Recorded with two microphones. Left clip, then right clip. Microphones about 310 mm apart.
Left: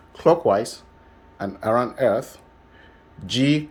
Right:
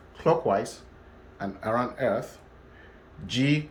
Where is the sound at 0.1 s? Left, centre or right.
Centre.